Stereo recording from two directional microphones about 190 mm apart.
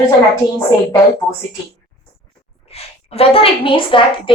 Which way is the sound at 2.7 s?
30° left (ahead or behind).